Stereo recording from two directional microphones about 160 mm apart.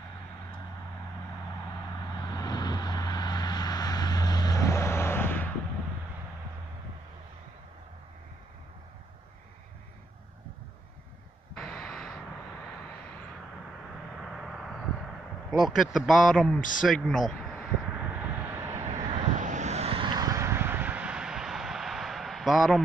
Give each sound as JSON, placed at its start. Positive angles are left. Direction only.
{"t": 2.1, "sound": "vehicle", "side_deg": 25}
{"t": 11.5, "sound": "vehicle", "side_deg": 5}
{"t": 14.1, "sound": "vehicle", "side_deg": 0}
{"t": 15.6, "sound": "speech", "side_deg": 0}
{"t": 16.8, "sound": "vehicle", "side_deg": 0}
{"t": 19.1, "sound": "vehicle", "side_deg": -50}